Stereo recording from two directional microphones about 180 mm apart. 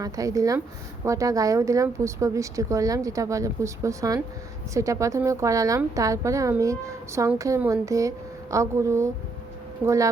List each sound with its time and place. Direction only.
0.0 s a woman's voice: 20° right (ahead or behind)